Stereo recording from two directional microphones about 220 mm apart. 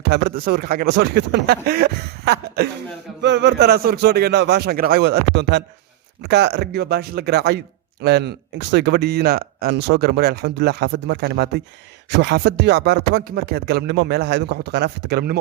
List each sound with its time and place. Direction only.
0.0 s speech: 45° right (ahead or behind)